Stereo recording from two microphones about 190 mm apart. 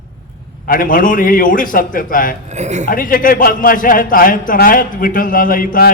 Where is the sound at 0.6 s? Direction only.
45° left (ahead or behind).